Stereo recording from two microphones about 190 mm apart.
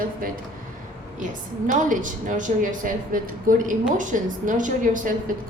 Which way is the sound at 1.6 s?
45° right (ahead or behind).